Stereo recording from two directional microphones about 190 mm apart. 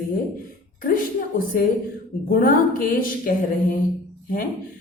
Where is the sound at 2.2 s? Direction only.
45° left (ahead or behind).